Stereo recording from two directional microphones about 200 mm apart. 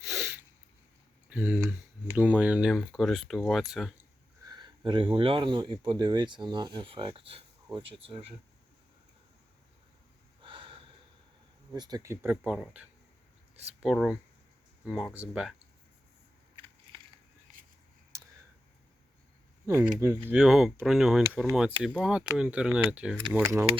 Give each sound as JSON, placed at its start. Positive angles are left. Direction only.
{"t": 1.3, "sound": "speech", "side_deg": -10}
{"t": 4.4, "sound": "speech", "side_deg": -20}
{"t": 10.4, "sound": "snort", "side_deg": -25}
{"t": 11.7, "sound": "speech", "side_deg": -20}
{"t": 12.4, "sound": "speech", "side_deg": 0}
{"t": 16.9, "sound": "biting", "side_deg": -25}
{"t": 19.6, "sound": "speech", "side_deg": -15}